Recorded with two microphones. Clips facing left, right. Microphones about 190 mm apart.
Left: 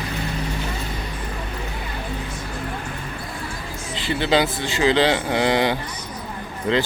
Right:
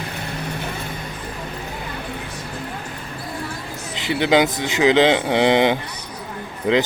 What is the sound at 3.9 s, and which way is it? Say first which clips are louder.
Speech: right 3 dB; 20° right (ahead or behind).